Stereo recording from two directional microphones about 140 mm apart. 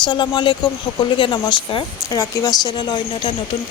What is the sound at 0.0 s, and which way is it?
Speech, 35° left (ahead or behind).